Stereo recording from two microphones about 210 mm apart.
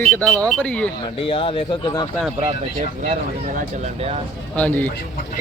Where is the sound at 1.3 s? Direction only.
25° left (ahead or behind).